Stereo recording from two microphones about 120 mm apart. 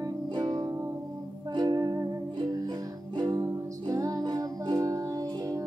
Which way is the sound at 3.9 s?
30° right (ahead or behind).